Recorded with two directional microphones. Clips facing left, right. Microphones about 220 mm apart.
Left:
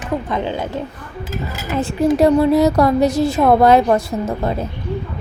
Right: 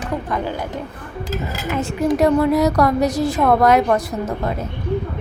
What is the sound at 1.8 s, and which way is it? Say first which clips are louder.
A woman's voice: left 3 dB; 30° left (ahead or behind).